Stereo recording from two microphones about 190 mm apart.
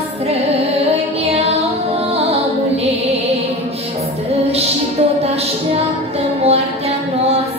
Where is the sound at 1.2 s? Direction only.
35° right (ahead or behind).